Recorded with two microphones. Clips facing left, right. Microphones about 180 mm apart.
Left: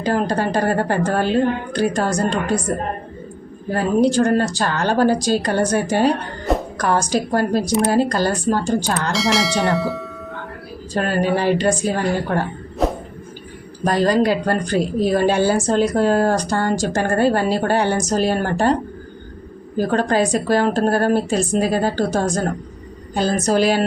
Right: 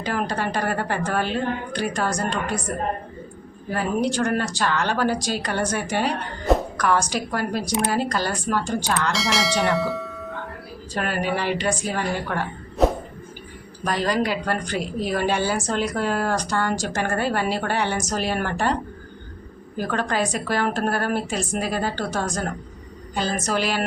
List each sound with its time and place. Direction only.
0.0 s speech: 40° left (ahead or behind)
3.7 s speech: 35° left (ahead or behind)
9.1 s speech: centre (ahead or behind)
10.9 s speech: 35° left (ahead or behind)
12.8 s a sound: centre (ahead or behind)
13.8 s speech: 40° left (ahead or behind)